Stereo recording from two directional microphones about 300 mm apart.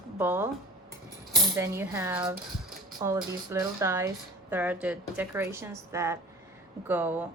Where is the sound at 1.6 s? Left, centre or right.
Centre.